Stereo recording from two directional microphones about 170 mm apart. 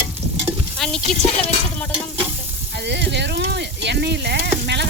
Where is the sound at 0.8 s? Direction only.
5° left (ahead or behind).